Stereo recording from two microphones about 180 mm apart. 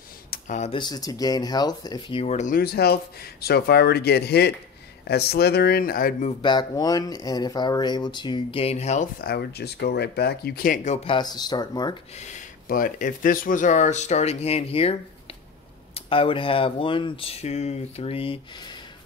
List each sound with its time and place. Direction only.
0.3 s a sound: 40° left (ahead or behind)
0.7 s speech: 25° left (ahead or behind); by 2.6 s 40° left (ahead or behind)
2.6 s speech: 60° left (ahead or behind)
6.4 s speech: 25° left (ahead or behind)
9.2 s speech: 65° left (ahead or behind); by 11.0 s 45° left (ahead or behind)
11.1 s speech: 25° left (ahead or behind)
12.3 s speech: 50° left (ahead or behind); by 18.8 s 25° left (ahead or behind)